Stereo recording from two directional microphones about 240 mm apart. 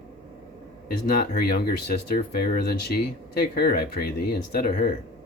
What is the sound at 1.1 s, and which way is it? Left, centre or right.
Speech, left.